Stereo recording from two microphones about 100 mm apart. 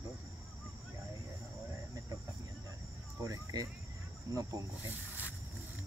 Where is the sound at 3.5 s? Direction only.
40° right (ahead or behind).